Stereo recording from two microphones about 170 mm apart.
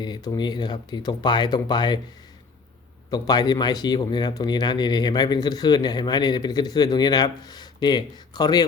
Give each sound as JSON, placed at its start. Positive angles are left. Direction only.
{"t": 0.0, "sound": "speech", "side_deg": 25}
{"t": 3.1, "sound": "speech", "side_deg": 25}